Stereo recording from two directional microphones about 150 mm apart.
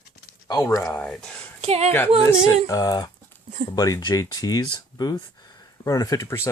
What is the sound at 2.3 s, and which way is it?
Speech, 25° left (ahead or behind).